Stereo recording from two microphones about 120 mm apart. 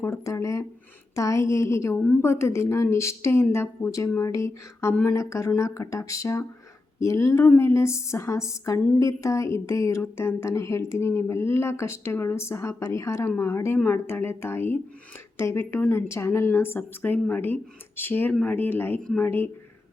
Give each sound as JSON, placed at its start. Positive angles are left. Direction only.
{"t": 0.0, "sound": "a woman's voice", "side_deg": 25}